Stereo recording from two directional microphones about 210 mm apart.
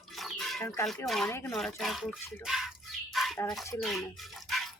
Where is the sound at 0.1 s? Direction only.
Centre (ahead or behind).